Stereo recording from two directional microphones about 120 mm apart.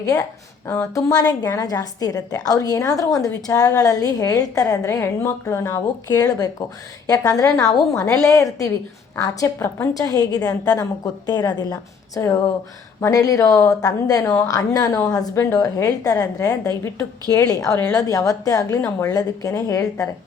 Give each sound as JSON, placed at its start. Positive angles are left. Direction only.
{"t": 0.7, "sound": "a woman's voice", "side_deg": 25}